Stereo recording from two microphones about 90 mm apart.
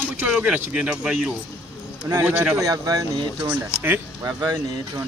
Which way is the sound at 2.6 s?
40° right (ahead or behind).